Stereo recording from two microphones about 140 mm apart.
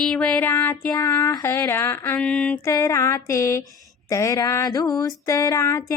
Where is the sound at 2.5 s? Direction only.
20° left (ahead or behind).